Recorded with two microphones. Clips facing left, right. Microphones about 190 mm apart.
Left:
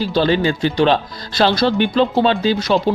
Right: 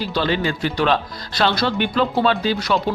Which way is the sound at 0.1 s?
30° left (ahead or behind).